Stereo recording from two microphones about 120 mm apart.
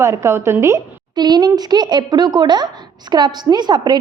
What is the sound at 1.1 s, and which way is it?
A woman's voice, 35° right (ahead or behind).